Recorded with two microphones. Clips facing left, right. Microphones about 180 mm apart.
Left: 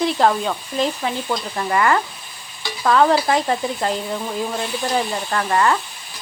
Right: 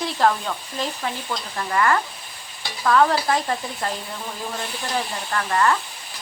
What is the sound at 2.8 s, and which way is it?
Speech, 25° left (ahead or behind).